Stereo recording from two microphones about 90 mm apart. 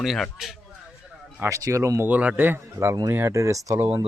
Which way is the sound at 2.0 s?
15° right (ahead or behind).